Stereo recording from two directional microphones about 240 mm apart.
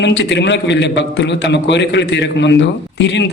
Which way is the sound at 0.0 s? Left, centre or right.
Left.